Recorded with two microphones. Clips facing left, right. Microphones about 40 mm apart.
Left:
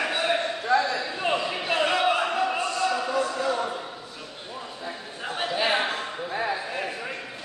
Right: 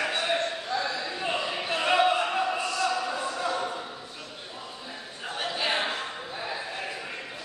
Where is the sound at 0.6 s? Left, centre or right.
Left.